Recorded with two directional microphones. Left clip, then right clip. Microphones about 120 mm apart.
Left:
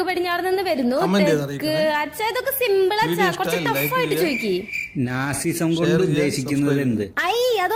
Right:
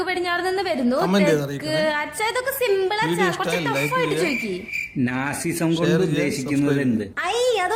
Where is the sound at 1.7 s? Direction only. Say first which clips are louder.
Left 1 dB; 30° left (ahead or behind).